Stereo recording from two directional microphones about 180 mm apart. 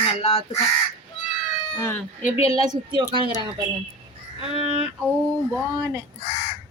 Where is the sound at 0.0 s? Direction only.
30° left (ahead or behind).